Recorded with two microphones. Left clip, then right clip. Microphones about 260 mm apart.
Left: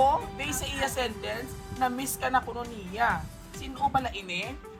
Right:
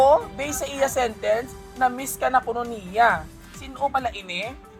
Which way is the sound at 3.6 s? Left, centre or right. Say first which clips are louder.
Right 3 dB; centre.